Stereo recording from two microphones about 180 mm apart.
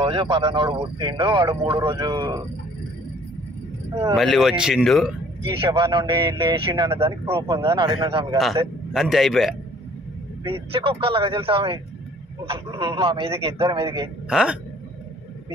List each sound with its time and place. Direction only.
0.0 s speech: 30° right (ahead or behind)
4.1 s speech: centre (ahead or behind)
5.4 s speech: 30° right (ahead or behind)
8.9 s speech: centre (ahead or behind)
10.4 s a man's voice: 30° right (ahead or behind)
14.3 s speech: 5° right (ahead or behind)